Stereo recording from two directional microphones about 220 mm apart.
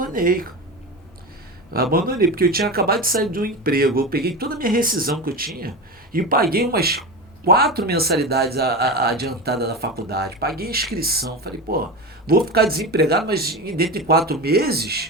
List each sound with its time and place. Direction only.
0.0 s speech: 40° right (ahead or behind)
1.7 s a man's voice: 45° right (ahead or behind)